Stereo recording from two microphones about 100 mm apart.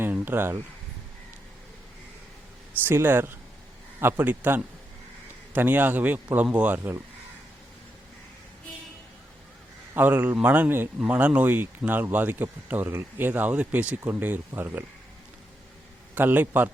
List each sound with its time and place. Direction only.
0.0 s speech: 20° right (ahead or behind)
2.8 s speech: 20° right (ahead or behind)
6.7 s speech: 25° right (ahead or behind)
9.9 s speech: 20° right (ahead or behind)
16.1 s speech: 20° right (ahead or behind)